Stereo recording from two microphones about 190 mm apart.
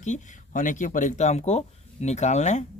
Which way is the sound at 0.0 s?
40° left (ahead or behind).